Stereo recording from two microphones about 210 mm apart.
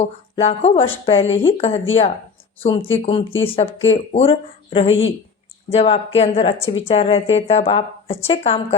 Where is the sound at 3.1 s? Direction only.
25° left (ahead or behind).